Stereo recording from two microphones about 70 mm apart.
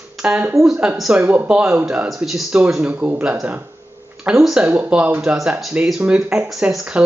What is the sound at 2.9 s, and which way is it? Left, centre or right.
Speech, right.